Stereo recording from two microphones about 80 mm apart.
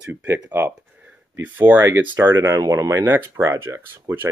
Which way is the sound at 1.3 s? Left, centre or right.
Right.